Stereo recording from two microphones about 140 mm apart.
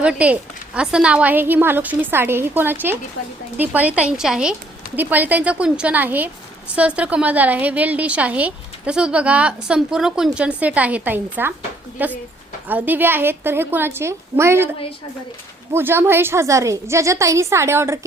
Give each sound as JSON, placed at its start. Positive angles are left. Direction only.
{"t": 0.0, "sound": "a woman's voice", "side_deg": -10}
{"t": 15.7, "sound": "a woman's voice", "side_deg": -15}